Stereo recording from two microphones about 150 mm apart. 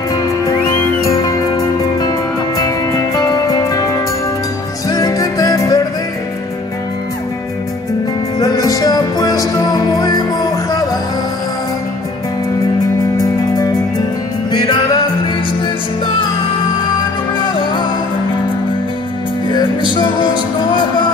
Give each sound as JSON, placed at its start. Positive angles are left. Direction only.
{"t": 0.7, "sound": "music", "side_deg": 20}
{"t": 8.4, "sound": "music", "side_deg": 25}
{"t": 14.5, "sound": "music", "side_deg": 25}
{"t": 17.4, "sound": "music", "side_deg": 30}
{"t": 19.5, "sound": "music", "side_deg": 30}